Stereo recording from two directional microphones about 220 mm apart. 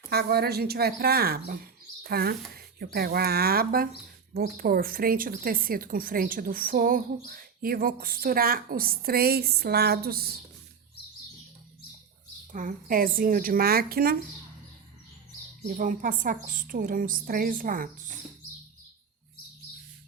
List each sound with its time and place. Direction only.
0.1 s a woman's voice: 45° right (ahead or behind)
12.5 s speech: 35° right (ahead or behind)
15.6 s speech: 40° right (ahead or behind)